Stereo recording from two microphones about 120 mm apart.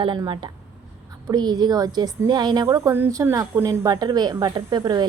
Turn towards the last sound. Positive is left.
turn(degrees=-35)  # may be behind; listen again after turning